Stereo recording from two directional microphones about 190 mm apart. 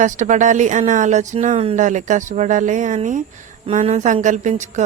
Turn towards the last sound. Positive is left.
turn(degrees=-40)  # may be behind; listen again after turning